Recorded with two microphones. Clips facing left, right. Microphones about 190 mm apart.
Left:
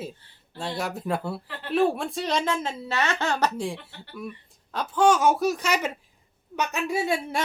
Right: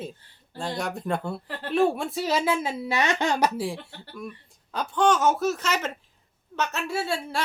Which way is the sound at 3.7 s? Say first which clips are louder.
Right 1 dB; 5° left (ahead or behind).